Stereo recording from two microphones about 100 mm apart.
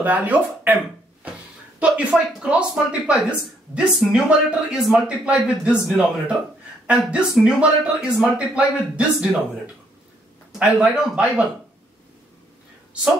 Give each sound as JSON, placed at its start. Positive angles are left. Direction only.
{"t": 0.0, "sound": "speech", "side_deg": -15}
{"t": 1.2, "sound": "a sound", "side_deg": -15}
{"t": 1.8, "sound": "speech", "side_deg": -10}
{"t": 10.6, "sound": "speech", "side_deg": -5}